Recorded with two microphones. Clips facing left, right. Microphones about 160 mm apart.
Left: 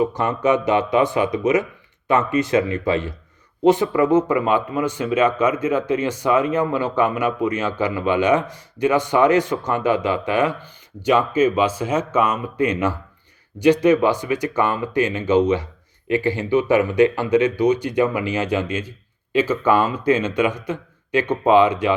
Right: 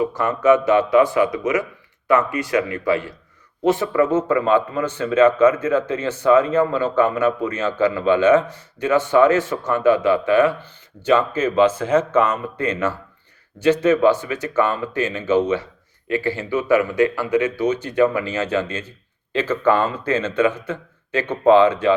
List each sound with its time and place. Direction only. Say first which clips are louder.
0.0 s speech: right 1 dB; 20° left (ahead or behind)